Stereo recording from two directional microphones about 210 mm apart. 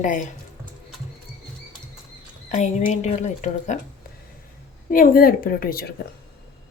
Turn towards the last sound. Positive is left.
turn(degrees=45)  # may be behind; listen again after turning